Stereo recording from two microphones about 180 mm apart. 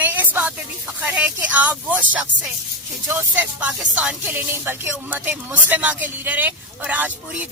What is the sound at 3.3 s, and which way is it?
Speech, 10° right (ahead or behind).